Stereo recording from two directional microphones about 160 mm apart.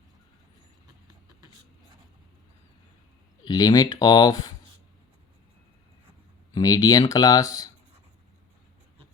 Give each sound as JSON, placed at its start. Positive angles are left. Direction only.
{"t": 3.4, "sound": "speech", "side_deg": 25}
{"t": 6.5, "sound": "speech", "side_deg": 25}